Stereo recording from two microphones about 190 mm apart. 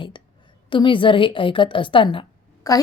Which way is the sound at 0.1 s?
25° left (ahead or behind).